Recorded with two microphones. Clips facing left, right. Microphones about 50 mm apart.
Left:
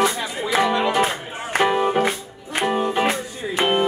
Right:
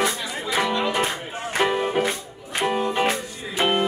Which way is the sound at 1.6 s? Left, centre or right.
Centre.